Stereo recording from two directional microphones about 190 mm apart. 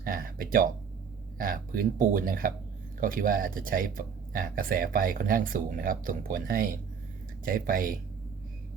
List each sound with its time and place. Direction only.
0.0 s speech: 50° right (ahead or behind)